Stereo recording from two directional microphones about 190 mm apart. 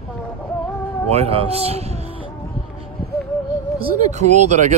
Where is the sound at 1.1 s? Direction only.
30° right (ahead or behind).